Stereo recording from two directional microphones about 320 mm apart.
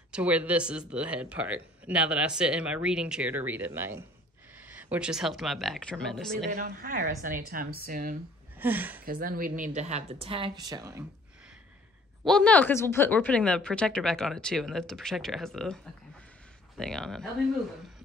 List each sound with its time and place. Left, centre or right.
0.1 s speech: centre
6.5 s speech: right
8.5 s speech: centre
9.0 s speech: right; by 11.1 s centre
12.3 s speech: centre